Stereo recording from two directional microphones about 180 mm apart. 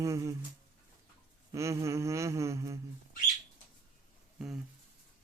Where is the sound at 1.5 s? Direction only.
15° right (ahead or behind).